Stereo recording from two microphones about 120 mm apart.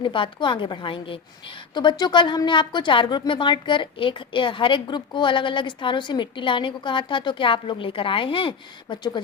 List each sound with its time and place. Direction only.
0.0 s a woman's voice: 45° left (ahead or behind)